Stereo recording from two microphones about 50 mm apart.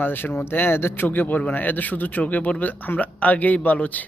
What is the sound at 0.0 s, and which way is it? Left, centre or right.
Speech, left.